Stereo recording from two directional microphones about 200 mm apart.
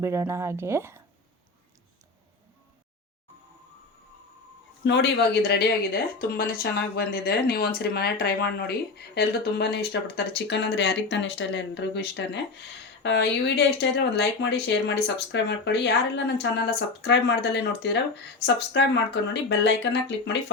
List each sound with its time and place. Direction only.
0.0 s speech: 15° right (ahead or behind)
4.8 s speech: 55° left (ahead or behind)